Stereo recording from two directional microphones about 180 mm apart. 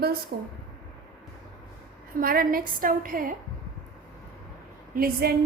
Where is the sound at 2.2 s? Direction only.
55° right (ahead or behind).